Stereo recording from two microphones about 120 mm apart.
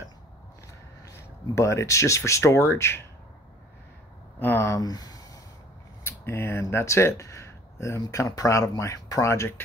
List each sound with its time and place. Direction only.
1.0 s speech: 25° left (ahead or behind)
4.4 s speech: 20° left (ahead or behind)
6.0 s speech: 20° left (ahead or behind)